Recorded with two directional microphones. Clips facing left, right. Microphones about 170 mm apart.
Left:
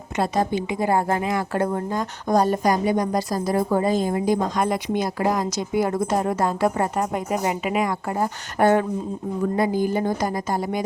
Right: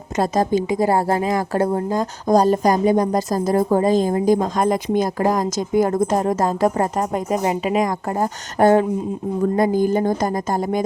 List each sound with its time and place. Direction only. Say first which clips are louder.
0.2 s speech: right 4 dB; 40° right (ahead or behind)